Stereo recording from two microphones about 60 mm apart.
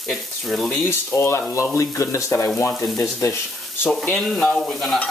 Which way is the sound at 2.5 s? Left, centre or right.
Left.